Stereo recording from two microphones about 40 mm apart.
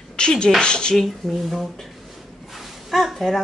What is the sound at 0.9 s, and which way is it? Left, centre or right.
Speech, centre.